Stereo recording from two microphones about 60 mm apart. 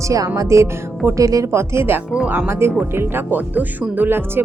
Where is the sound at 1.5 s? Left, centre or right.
Right.